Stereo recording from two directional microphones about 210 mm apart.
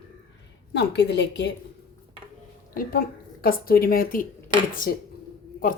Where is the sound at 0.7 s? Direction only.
55° left (ahead or behind).